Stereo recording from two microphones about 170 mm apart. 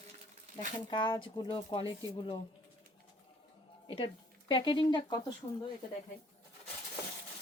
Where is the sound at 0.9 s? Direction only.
30° left (ahead or behind).